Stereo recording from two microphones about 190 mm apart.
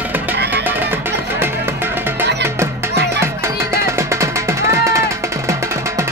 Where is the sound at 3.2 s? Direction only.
15° right (ahead or behind).